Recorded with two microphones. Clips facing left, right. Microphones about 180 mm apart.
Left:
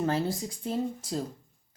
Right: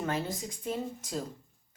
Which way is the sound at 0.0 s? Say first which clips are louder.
Left 5 dB; 30° left (ahead or behind).